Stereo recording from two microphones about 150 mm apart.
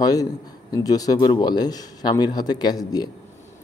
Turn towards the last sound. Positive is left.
turn(degrees=25)  # may be behind; listen again after turning